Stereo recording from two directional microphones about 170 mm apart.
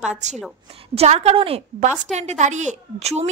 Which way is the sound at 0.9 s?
40° right (ahead or behind).